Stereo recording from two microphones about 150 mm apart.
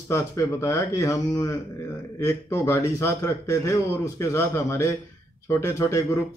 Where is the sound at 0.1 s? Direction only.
20° left (ahead or behind).